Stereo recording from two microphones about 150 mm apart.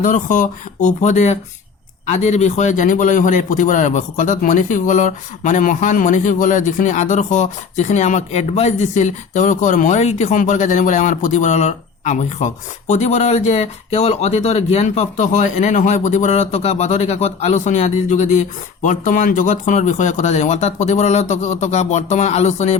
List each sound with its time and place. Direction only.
0.0 s a man's voice: 60° left (ahead or behind)